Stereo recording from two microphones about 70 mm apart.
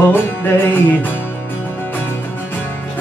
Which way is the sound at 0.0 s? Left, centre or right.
Left.